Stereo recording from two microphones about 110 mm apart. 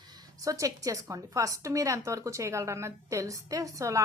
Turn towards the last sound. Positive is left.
turn(degrees=-30)  # may be behind; listen again after turning